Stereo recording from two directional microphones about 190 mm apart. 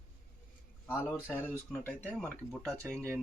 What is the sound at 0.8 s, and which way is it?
Speech, 10° left (ahead or behind).